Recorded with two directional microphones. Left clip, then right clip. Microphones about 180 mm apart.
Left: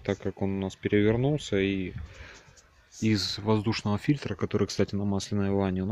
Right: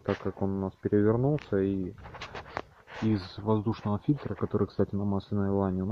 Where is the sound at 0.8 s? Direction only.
45° left (ahead or behind).